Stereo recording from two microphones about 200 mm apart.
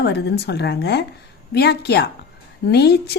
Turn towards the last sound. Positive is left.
turn(degrees=55)  # may be behind; listen again after turning